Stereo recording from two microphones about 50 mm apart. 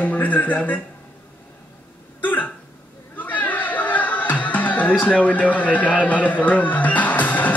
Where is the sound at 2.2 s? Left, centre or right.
Left.